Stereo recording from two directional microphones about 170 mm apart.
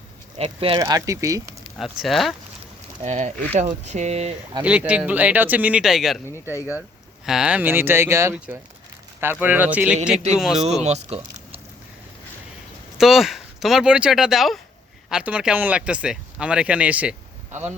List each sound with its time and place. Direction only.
0.3 s speech: 35° right (ahead or behind)
0.8 s speech: 20° right (ahead or behind)
1.8 s speech: centre (ahead or behind)
3.0 s speech: 40° right (ahead or behind)
4.6 s speech: 10° right (ahead or behind)
7.3 s speech: 5° right (ahead or behind)
10.8 s speech: 40° right (ahead or behind)
13.0 s speech: centre (ahead or behind)